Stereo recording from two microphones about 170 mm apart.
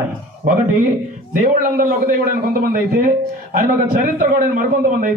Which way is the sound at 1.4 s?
55° right (ahead or behind).